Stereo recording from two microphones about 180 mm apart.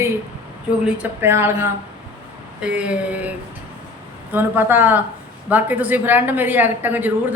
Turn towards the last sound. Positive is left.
turn(degrees=-10)  # may be behind; listen again after turning